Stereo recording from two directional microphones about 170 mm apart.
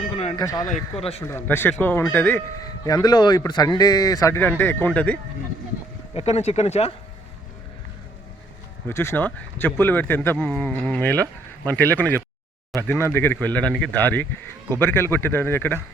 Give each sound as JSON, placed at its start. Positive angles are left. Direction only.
{"t": 0.3, "sound": "speech", "side_deg": 20}
{"t": 0.7, "sound": "speech", "side_deg": 35}
{"t": 1.2, "sound": "speech", "side_deg": 15}
{"t": 2.6, "sound": "speech", "side_deg": 20}
{"t": 6.1, "sound": "speech", "side_deg": 40}
{"t": 8.9, "sound": "speech", "side_deg": 15}